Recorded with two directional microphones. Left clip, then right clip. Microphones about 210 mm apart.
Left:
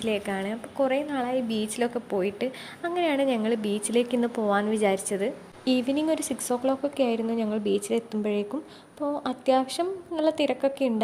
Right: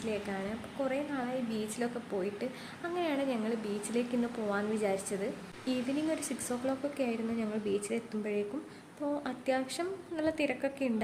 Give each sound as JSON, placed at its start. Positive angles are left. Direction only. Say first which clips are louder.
{"t": 0.0, "sound": "a woman's voice", "louder": "left 8 dB", "side_deg": 40}